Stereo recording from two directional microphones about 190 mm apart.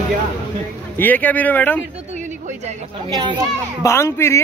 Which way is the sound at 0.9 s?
10° left (ahead or behind).